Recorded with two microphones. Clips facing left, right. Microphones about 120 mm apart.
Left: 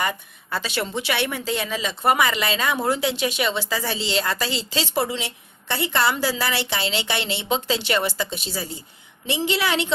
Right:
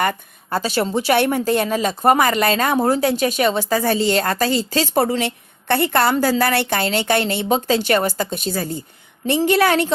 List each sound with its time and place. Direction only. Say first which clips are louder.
0.0 s a woman's voice: right 5 dB; 55° right (ahead or behind)
0.6 s speech: right 8 dB; 40° right (ahead or behind)